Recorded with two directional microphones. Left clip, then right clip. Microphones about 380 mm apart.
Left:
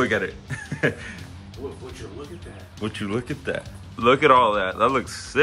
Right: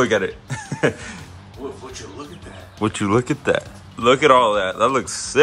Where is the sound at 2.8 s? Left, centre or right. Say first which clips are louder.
Right 9 dB; centre.